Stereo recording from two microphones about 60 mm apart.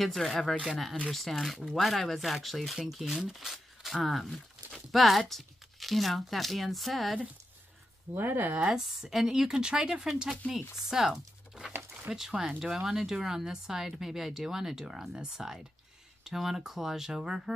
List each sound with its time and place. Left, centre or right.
0.0 s speech: centre
8.1 s speech: right
8.6 s speech: centre